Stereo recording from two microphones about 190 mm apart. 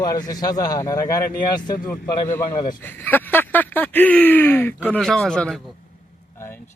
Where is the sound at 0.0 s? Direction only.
20° left (ahead or behind).